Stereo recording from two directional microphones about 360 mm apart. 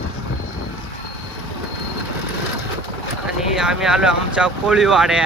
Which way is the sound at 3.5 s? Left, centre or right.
Centre.